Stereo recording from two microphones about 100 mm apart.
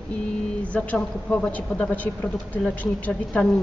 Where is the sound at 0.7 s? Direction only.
10° left (ahead or behind).